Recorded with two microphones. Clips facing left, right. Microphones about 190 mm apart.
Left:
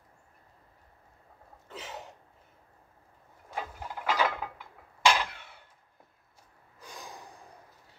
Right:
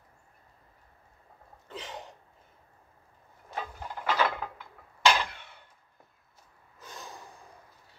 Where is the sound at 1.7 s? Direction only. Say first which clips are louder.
Right 1 dB; 5° left (ahead or behind).